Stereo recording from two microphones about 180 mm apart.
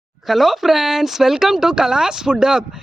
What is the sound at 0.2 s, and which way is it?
Speech, centre (ahead or behind).